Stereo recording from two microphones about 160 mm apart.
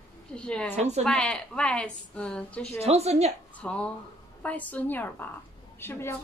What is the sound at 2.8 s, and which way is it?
Speech, 40° right (ahead or behind).